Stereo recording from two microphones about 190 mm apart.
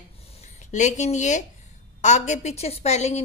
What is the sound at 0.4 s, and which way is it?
A woman's voice, 40° left (ahead or behind).